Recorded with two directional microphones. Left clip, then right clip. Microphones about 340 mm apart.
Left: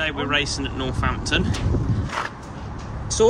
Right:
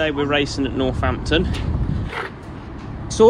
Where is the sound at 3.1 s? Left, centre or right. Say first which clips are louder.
Right 4 dB; centre.